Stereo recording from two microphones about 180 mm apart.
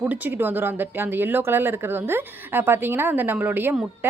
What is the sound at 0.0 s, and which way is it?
Speech, 10° right (ahead or behind).